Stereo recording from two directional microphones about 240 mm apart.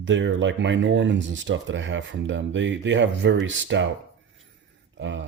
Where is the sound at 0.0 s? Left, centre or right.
Right.